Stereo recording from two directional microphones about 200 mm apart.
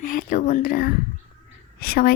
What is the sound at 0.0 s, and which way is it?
Speech, 45° left (ahead or behind).